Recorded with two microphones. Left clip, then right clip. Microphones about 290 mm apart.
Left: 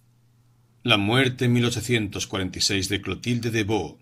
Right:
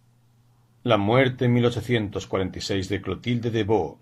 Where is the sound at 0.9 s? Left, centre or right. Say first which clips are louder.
Right 1 dB; left.